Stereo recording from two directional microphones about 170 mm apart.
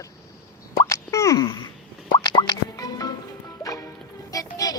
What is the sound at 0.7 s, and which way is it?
Plop, 15° left (ahead or behind).